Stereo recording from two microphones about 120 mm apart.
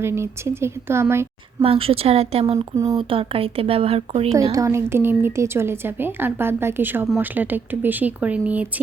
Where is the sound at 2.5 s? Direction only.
30° right (ahead or behind).